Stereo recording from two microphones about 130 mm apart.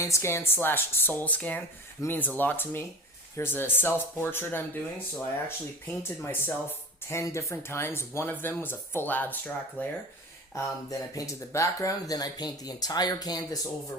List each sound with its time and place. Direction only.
0.0 s speech: 20° left (ahead or behind)
10.5 s speech: 25° left (ahead or behind)